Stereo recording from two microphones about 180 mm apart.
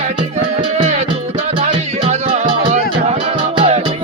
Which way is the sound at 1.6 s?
35° right (ahead or behind).